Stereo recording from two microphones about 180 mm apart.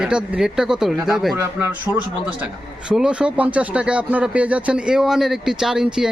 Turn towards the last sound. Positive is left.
turn(degrees=-5)  # may be behind; listen again after turning